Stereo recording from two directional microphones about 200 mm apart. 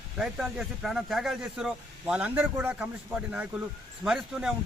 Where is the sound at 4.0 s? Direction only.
5° right (ahead or behind).